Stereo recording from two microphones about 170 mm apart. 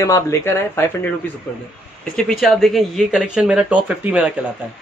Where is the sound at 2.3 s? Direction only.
Centre (ahead or behind).